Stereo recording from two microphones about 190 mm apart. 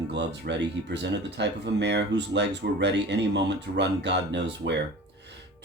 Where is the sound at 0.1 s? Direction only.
65° right (ahead or behind).